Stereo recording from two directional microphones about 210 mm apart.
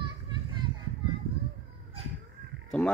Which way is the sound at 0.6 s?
20° right (ahead or behind).